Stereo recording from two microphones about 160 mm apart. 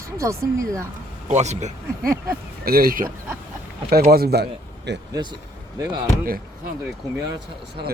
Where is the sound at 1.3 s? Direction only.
45° right (ahead or behind).